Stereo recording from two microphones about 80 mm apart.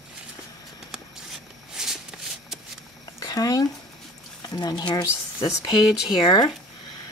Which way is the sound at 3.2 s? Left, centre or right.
Left.